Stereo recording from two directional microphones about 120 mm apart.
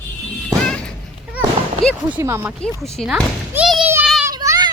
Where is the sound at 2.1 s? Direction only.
20° right (ahead or behind).